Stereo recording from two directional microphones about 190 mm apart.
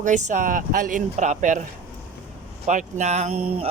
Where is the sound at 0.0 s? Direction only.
40° right (ahead or behind).